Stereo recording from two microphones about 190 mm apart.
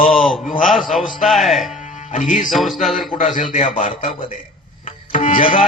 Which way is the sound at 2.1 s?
40° left (ahead or behind).